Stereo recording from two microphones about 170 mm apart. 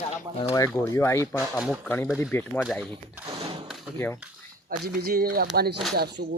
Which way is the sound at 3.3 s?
35° right (ahead or behind).